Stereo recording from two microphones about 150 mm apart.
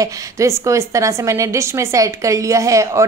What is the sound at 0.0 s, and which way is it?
A woman's voice, 20° right (ahead or behind).